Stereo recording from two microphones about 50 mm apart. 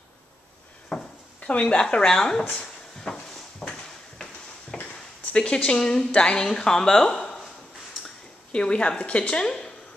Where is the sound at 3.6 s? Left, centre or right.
Centre.